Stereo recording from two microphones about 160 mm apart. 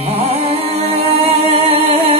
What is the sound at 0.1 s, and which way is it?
Music, 40° right (ahead or behind).